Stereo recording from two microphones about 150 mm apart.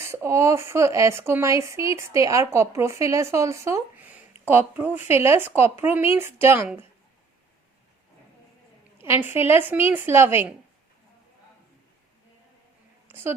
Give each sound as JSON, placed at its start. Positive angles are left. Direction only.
{"t": 0.0, "sound": "a woman's voice", "side_deg": -20}
{"t": 9.0, "sound": "a woman's voice", "side_deg": -15}
{"t": 13.1, "sound": "a sound", "side_deg": -15}